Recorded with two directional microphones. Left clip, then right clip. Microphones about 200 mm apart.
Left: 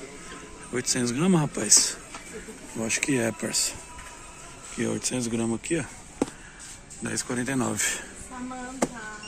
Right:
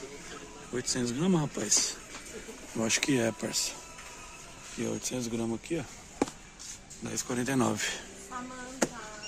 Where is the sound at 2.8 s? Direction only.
20° right (ahead or behind).